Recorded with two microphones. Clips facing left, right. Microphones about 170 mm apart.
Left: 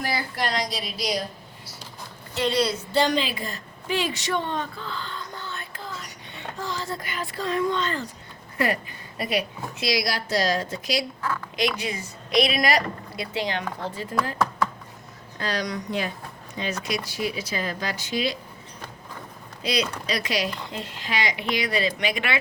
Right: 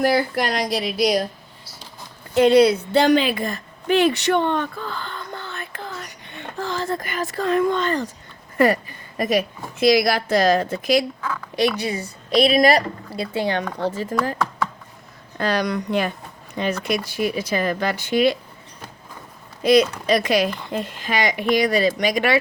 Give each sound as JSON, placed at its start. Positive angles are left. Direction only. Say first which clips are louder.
{"t": 0.0, "sound": "speech", "louder": "right 9 dB", "side_deg": -55}
{"t": 2.3, "sound": "a woman's voice", "louder": "right 10 dB", "side_deg": -50}
{"t": 11.8, "sound": "speech", "louder": "right 5 dB", "side_deg": -35}
{"t": 13.9, "sound": "speech", "louder": "right 4 dB", "side_deg": -45}
{"t": 15.4, "sound": "speech", "louder": "right 7 dB", "side_deg": -60}
{"t": 19.6, "sound": "speech", "louder": "right 11 dB", "side_deg": -50}